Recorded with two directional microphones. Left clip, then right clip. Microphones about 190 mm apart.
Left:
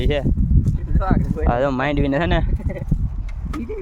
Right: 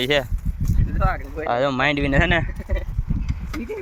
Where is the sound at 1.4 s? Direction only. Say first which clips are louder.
Even; 30° left (ahead or behind).